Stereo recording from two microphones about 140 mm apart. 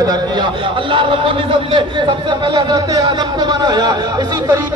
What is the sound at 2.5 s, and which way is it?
Speech, 30° right (ahead or behind).